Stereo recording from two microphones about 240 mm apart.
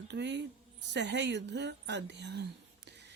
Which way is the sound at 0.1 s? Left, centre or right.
Right.